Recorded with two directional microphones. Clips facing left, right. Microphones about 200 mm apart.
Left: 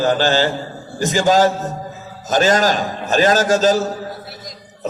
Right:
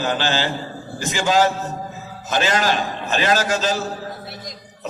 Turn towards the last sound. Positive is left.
turn(degrees=45)  # may be behind; listen again after turning